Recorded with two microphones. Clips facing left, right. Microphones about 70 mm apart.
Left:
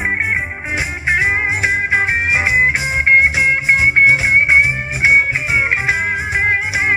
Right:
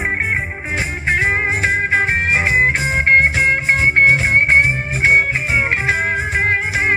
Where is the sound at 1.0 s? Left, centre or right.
Centre.